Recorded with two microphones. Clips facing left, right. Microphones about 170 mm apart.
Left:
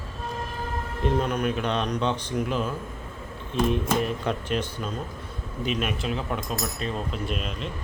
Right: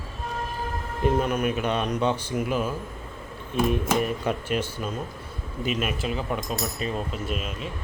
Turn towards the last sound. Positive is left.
turn(degrees=-5)  # may be behind; listen again after turning